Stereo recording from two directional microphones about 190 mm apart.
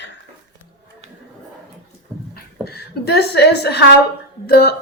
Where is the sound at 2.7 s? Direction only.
60° left (ahead or behind).